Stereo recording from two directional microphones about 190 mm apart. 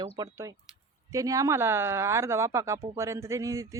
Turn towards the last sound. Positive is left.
turn(degrees=-15)  # may be behind; listen again after turning